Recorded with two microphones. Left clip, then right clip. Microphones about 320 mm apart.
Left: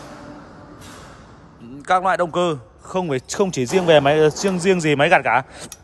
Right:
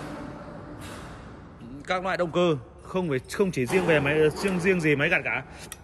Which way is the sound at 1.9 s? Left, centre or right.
Centre.